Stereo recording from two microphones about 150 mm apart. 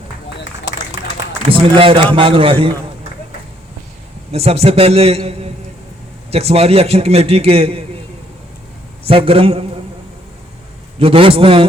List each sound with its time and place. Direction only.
1.5 s a man's voice: 35° right (ahead or behind)
4.3 s a man's voice: 40° right (ahead or behind)
9.0 s a man's voice: 40° right (ahead or behind)
11.0 s a man's voice: 40° right (ahead or behind)